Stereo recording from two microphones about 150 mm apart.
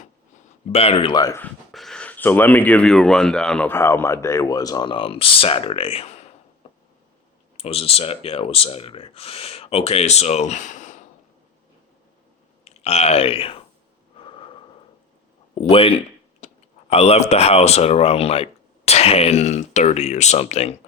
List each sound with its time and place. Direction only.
0.7 s speech: 40° left (ahead or behind)
1.1 s speech: 25° left (ahead or behind)
1.7 s speech: centre (ahead or behind); by 6.3 s 45° left (ahead or behind)
7.5 s speech: 40° left (ahead or behind)
12.6 s speech: 45° left (ahead or behind)
15.7 s speech: 40° left (ahead or behind)
16.4 s a sound: 50° left (ahead or behind)
16.9 s speech: 40° left (ahead or behind)